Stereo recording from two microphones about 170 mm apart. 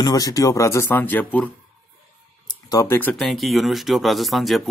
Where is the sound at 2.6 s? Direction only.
15° left (ahead or behind).